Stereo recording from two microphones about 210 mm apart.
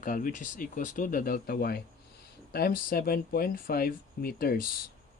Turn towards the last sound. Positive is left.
turn(degrees=45)  # may be behind; listen again after turning